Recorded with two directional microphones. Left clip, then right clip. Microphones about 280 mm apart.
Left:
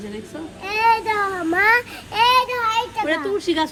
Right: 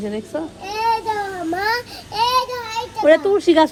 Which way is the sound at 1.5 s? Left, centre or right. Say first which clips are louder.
Left 5 dB; centre.